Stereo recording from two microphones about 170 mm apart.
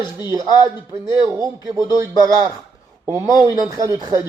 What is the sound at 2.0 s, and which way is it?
A man's voice, 20° right (ahead or behind).